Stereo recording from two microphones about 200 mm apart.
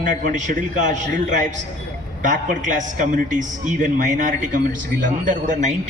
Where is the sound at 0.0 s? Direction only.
40° right (ahead or behind).